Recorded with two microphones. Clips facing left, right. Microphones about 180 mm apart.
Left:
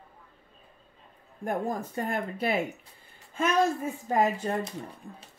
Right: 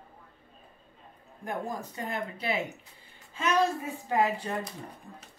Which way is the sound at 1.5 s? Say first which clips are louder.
Left 4 dB; 50° left (ahead or behind).